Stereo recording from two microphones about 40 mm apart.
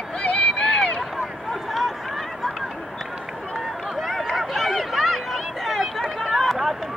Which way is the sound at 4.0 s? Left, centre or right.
Centre.